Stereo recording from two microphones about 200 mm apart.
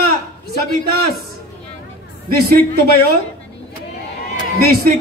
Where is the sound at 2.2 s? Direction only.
50° right (ahead or behind).